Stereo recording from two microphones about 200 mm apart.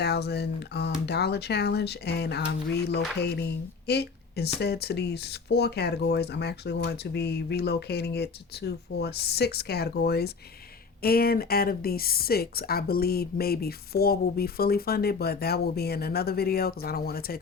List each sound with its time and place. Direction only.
0.0 s speech: 55° left (ahead or behind)